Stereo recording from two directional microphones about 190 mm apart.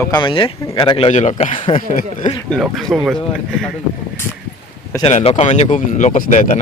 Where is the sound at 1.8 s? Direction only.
50° left (ahead or behind).